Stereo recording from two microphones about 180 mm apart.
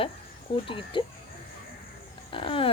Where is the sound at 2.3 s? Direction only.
30° left (ahead or behind).